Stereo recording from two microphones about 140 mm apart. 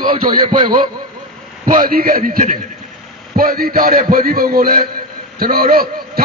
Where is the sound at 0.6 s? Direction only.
35° right (ahead or behind).